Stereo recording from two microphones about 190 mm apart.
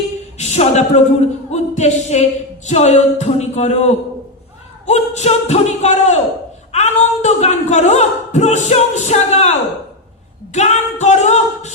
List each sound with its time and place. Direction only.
0.3 s speech: 35° left (ahead or behind)
1.5 s music: 35° left (ahead or behind)
2.6 s speech: 35° left (ahead or behind)